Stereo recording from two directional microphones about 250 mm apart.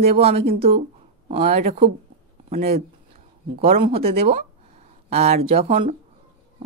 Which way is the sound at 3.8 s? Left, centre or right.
Right.